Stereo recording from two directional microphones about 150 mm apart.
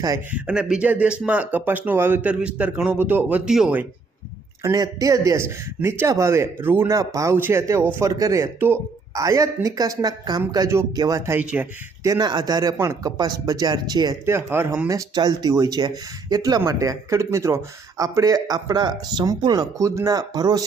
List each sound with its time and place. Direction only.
0.3 s speech: 10° right (ahead or behind)
4.6 s speech: 25° right (ahead or behind)
11.3 s speech: 10° right (ahead or behind)
12.0 s speech: 25° right (ahead or behind)